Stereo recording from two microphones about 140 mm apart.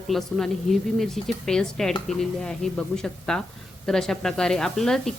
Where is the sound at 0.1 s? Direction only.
5° left (ahead or behind).